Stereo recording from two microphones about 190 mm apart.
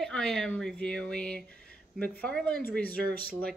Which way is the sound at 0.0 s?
5° left (ahead or behind).